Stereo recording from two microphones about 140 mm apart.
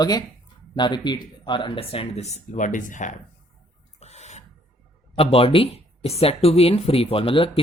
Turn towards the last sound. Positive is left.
turn(degrees=40)  # may be behind; listen again after turning